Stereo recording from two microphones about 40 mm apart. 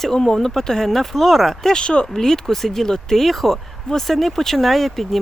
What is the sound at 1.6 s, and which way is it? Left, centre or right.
Speech, left.